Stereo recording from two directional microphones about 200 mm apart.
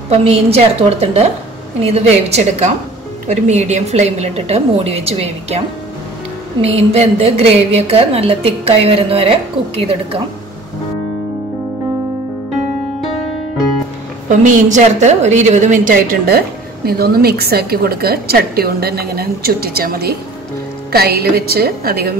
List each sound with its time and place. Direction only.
0.1 s a woman's voice: 30° right (ahead or behind)
6.6 s a woman's voice: 30° right (ahead or behind)
14.4 s a woman's voice: 35° right (ahead or behind)